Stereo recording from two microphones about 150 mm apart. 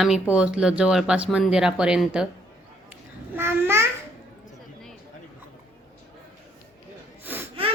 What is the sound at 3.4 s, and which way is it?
Babbling, 15° right (ahead or behind).